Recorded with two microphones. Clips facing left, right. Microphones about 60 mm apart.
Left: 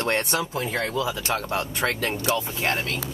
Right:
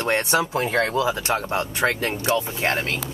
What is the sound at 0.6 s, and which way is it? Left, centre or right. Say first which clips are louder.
Speech: right 5 dB; right.